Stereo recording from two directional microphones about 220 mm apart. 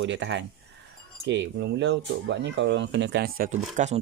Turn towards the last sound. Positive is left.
turn(degrees=-35)  # may be behind; listen again after turning